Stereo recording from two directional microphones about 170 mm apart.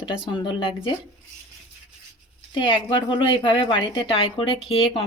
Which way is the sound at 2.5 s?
30° left (ahead or behind).